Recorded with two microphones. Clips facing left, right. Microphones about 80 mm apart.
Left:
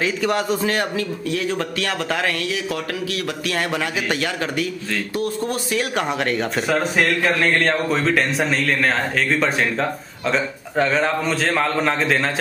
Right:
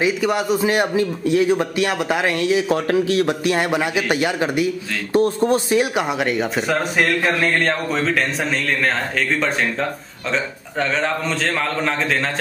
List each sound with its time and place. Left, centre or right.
0.0 s a man's voice: centre
0.7 s speech: centre
5.1 s speech: right
5.9 s a man's voice: centre